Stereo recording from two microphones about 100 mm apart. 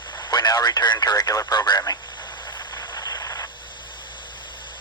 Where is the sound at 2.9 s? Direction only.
40° left (ahead or behind).